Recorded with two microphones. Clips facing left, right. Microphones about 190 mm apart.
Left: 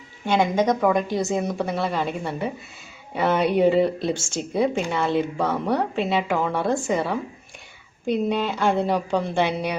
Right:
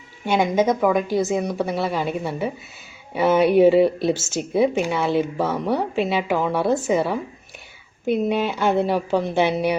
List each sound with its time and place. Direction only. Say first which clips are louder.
0.3 s a woman's voice: right 1 dB; 5° right (ahead or behind)